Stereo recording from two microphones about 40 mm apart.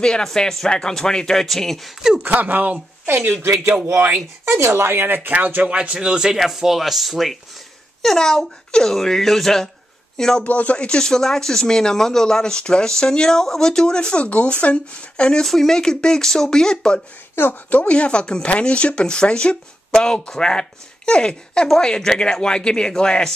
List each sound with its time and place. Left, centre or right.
0.0 s speech: centre
2.2 s speech: right
3.1 s speech: right
4.5 s speech: right
5.3 s speech: right
5.7 s speech: right
5.9 s speech: centre
6.3 s speech: centre
8.0 s speech: centre
10.4 s speech: left
10.9 s speech: centre
15.4 s speech: centre
17.6 s speech: left
19.9 s speech: centre